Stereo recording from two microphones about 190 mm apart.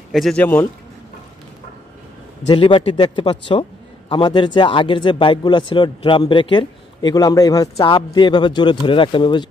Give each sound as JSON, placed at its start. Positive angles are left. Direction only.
{"t": 0.1, "sound": "a man's voice", "side_deg": 0}
{"t": 2.4, "sound": "speech", "side_deg": 30}